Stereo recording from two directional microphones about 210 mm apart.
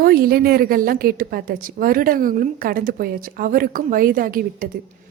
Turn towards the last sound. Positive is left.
turn(degrees=-40)  # may be behind; listen again after turning